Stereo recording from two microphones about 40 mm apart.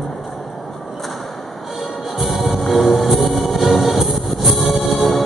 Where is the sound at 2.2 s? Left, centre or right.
Centre.